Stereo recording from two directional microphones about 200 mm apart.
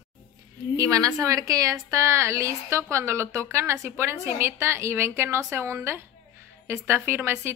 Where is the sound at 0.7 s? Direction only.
15° right (ahead or behind).